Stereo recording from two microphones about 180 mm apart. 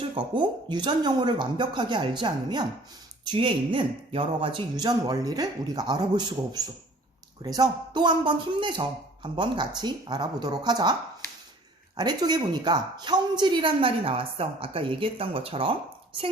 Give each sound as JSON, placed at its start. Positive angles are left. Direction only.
{"t": 0.0, "sound": "a woman's voice", "side_deg": -30}
{"t": 11.9, "sound": "a woman's voice", "side_deg": -20}